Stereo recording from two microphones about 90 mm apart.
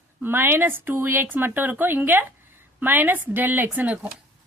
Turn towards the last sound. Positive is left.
turn(degrees=-20)  # may be behind; listen again after turning